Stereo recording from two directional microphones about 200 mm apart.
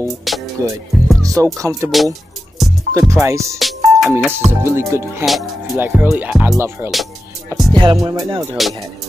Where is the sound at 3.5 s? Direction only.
Centre (ahead or behind).